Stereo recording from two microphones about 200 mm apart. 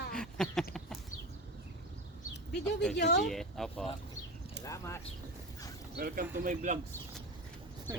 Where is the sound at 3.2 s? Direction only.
Centre (ahead or behind).